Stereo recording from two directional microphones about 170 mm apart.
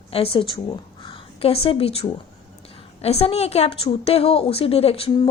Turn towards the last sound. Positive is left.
turn(degrees=35)  # may be behind; listen again after turning